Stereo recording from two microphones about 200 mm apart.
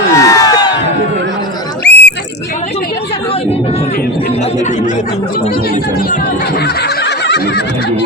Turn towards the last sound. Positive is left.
turn(degrees=55)  # may be behind; listen again after turning